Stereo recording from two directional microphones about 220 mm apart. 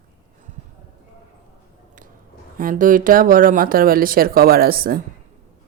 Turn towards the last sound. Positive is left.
turn(degrees=-40)  # may be behind; listen again after turning